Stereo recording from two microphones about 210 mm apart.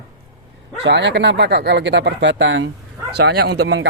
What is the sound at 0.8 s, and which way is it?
Speech, 55° right (ahead or behind).